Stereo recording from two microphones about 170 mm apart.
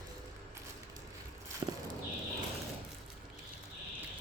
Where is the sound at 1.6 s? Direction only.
30° right (ahead or behind).